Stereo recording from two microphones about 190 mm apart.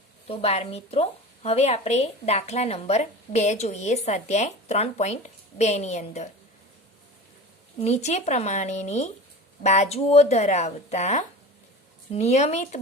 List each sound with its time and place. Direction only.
0.3 s a woman's voice: 35° left (ahead or behind)
7.8 s a woman's voice: 35° left (ahead or behind)